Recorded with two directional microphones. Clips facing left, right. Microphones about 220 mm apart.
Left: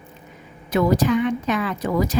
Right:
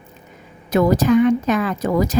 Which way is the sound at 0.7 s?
45° right (ahead or behind).